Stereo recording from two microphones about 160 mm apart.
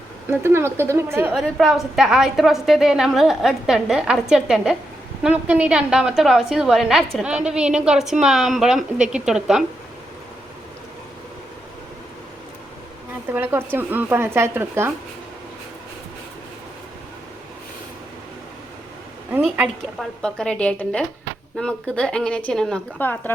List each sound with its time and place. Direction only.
0.3 s speech: 15° right (ahead or behind)
1.3 s a woman's voice: centre (ahead or behind)
13.3 s speech: 15° right (ahead or behind)
19.3 s speech: 10° right (ahead or behind)
20.2 s a woman's voice: 5° left (ahead or behind)